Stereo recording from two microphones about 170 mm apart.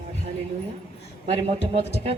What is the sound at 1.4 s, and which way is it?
Speech, 40° right (ahead or behind).